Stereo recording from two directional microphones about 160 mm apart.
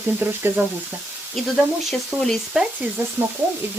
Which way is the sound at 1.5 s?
Centre (ahead or behind).